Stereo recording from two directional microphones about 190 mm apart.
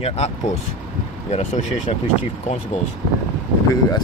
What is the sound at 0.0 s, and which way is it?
Speech, 35° left (ahead or behind).